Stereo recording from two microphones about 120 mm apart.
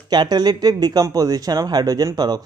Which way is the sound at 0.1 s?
35° right (ahead or behind).